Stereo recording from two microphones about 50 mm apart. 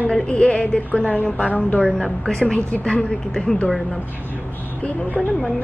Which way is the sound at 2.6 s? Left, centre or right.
Left.